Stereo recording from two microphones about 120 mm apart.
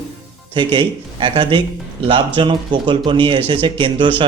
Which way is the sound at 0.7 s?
45° right (ahead or behind).